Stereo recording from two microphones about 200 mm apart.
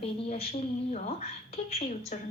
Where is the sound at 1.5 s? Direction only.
30° left (ahead or behind).